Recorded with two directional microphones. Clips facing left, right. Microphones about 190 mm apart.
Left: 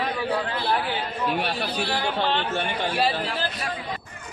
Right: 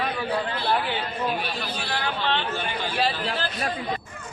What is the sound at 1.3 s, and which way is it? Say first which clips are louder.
Speech: left 3 dB; 65° left (ahead or behind).